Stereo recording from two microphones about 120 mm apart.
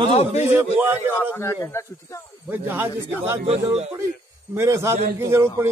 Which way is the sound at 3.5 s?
60° right (ahead or behind).